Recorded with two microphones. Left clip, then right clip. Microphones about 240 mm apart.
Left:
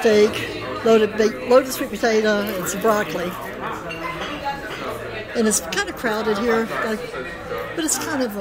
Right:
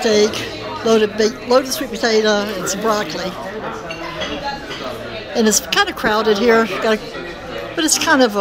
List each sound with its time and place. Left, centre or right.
0.0 s a woman's voice: centre
5.3 s a woman's voice: centre